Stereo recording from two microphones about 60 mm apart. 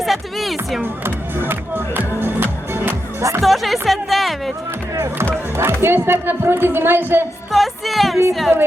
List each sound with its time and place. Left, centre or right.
0.0 s speech: centre
1.0 s speech: right
2.1 s music: right
3.4 s speech: centre
4.9 s a woman's voice: right
7.5 s speech: centre